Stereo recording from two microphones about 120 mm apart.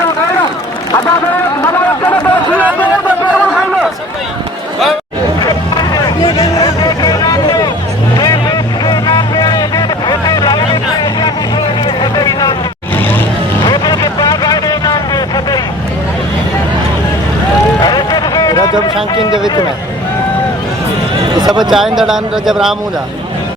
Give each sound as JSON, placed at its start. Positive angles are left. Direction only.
{"t": 1.6, "sound": "a sound", "side_deg": 15}
{"t": 3.2, "sound": "chatter", "side_deg": -5}
{"t": 5.5, "sound": "music", "side_deg": 30}
{"t": 8.2, "sound": "vehicle", "side_deg": 30}
{"t": 13.7, "sound": "vehicle", "side_deg": 35}
{"t": 17.7, "sound": "a sound", "side_deg": 35}
{"t": 19.1, "sound": "run", "side_deg": 35}
{"t": 21.3, "sound": "a sound", "side_deg": -35}
{"t": 21.7, "sound": "speech", "side_deg": -5}